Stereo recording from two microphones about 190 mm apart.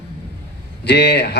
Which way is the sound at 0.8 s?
65° left (ahead or behind).